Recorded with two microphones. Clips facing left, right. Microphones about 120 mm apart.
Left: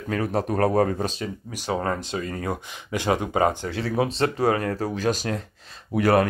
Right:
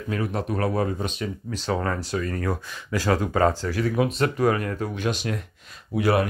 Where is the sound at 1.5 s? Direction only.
15° left (ahead or behind).